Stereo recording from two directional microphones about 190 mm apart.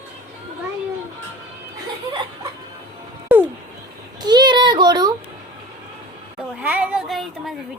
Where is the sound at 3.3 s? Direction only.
10° right (ahead or behind).